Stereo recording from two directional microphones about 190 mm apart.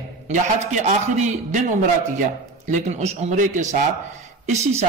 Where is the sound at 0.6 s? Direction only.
40° right (ahead or behind).